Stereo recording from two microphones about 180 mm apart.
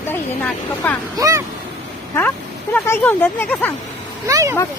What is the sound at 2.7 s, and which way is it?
Speech, 10° left (ahead or behind).